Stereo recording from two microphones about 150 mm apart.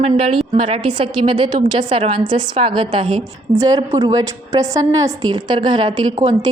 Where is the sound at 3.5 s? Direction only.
20° right (ahead or behind).